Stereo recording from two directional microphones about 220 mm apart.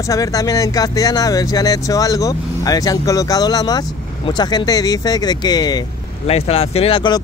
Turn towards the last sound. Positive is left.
turn(degrees=25)  # may be behind; listen again after turning